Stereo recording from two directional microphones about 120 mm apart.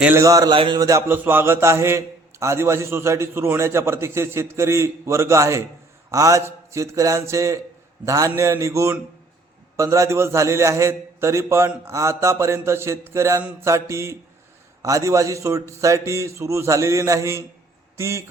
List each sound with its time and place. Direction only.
0.2 s a man's voice: 30° right (ahead or behind)
0.5 s speech: 45° right (ahead or behind)
0.8 s a man's voice: 25° right (ahead or behind)